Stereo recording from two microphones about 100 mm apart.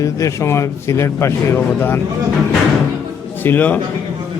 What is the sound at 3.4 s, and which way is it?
Speech, 15° left (ahead or behind).